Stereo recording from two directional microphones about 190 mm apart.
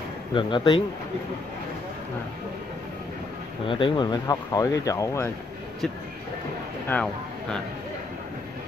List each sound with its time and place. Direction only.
0.3 s speech: 25° left (ahead or behind)
3.6 s speech: 25° left (ahead or behind)
6.9 s speech: 10° left (ahead or behind)